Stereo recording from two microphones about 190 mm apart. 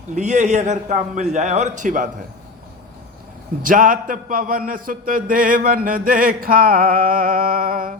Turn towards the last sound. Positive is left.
turn(degrees=-50)  # may be behind; listen again after turning